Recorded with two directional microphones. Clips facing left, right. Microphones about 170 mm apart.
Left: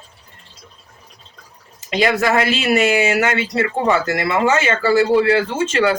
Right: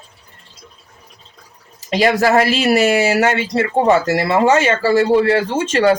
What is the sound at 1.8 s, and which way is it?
Speech, 35° right (ahead or behind).